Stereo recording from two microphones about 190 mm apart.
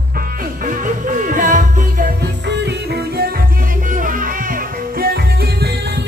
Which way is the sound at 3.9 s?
45° right (ahead or behind).